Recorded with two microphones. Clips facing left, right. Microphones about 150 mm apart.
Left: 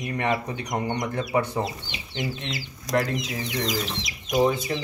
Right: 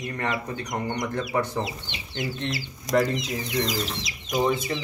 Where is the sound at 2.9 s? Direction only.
Centre (ahead or behind).